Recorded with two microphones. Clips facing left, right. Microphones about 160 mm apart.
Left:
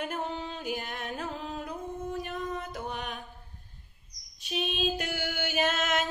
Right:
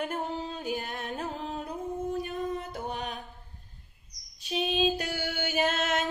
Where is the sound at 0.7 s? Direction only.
35° right (ahead or behind).